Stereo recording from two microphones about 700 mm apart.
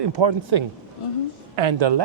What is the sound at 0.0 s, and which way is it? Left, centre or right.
Speech, right.